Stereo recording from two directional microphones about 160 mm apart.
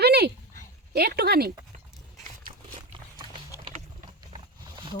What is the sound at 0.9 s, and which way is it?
Speech, 80° right.